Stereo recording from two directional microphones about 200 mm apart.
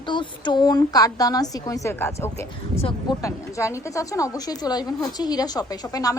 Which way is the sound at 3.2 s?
15° left (ahead or behind).